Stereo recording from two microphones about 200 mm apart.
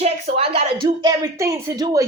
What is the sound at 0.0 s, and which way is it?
A woman's voice, 30° right (ahead or behind).